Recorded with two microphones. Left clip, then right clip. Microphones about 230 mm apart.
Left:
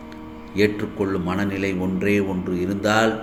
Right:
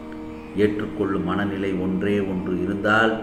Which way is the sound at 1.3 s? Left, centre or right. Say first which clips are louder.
Even; left.